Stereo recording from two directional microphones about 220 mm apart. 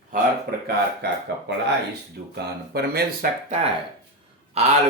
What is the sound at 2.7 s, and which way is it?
Speech, 45° right (ahead or behind).